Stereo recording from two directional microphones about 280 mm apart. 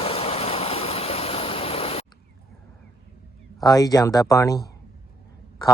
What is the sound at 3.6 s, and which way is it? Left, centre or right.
Speech, centre.